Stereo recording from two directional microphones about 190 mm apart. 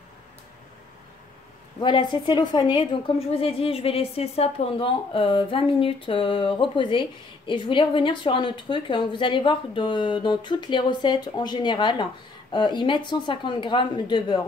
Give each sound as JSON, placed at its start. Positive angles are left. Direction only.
{"t": 1.8, "sound": "speech", "side_deg": 25}